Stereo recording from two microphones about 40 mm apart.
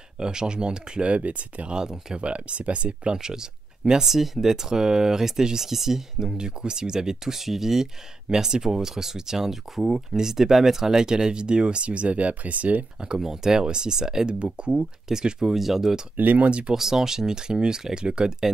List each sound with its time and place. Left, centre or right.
0.2 s speech: centre
1.8 s speech: centre
2.1 s speech: right
3.2 s speech: centre; by 12.8 s right
13.2 s speech: centre
14.4 s speech: right; by 16.0 s centre
16.2 s speech: right
16.4 s speech: right
16.7 s speech: centre